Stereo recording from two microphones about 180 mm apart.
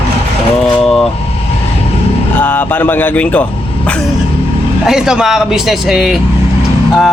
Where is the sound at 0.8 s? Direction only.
5° left (ahead or behind).